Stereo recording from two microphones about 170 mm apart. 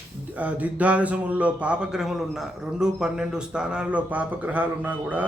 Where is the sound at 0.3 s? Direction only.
10° right (ahead or behind).